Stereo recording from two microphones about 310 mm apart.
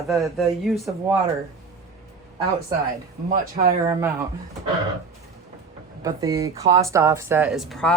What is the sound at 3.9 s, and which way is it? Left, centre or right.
Speech, centre.